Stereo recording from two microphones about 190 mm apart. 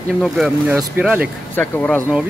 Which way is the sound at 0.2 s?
Centre (ahead or behind).